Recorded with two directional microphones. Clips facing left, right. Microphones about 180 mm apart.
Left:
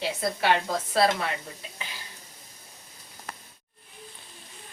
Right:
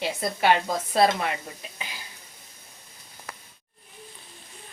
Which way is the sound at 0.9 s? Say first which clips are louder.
Right 2 dB; 20° right (ahead or behind).